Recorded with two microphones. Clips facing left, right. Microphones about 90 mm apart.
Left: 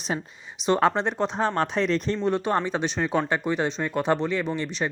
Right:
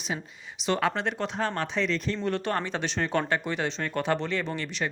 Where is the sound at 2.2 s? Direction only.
20° left (ahead or behind).